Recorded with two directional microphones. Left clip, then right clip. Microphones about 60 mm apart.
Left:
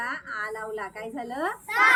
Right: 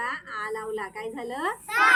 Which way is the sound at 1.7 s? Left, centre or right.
Right.